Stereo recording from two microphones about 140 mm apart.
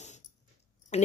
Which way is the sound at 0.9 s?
50° left (ahead or behind).